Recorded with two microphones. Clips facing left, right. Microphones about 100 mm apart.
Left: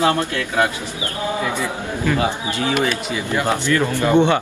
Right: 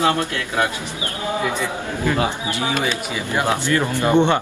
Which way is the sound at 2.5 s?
20° right (ahead or behind).